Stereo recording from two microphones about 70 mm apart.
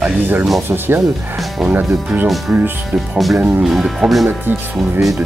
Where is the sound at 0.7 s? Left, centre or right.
Right.